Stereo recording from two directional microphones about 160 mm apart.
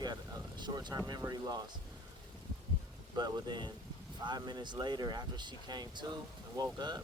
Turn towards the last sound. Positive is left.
turn(degrees=-25)  # may be behind; listen again after turning